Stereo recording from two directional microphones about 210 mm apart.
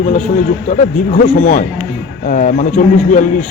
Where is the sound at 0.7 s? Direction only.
35° left (ahead or behind).